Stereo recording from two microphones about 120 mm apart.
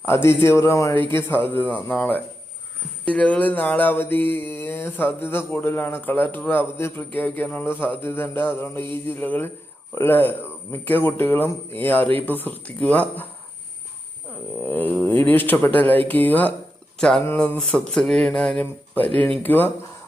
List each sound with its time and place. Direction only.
0.0 s a man's voice: 20° left (ahead or behind)
1.1 s mantra: 15° left (ahead or behind)
14.7 s mantra: 15° left (ahead or behind)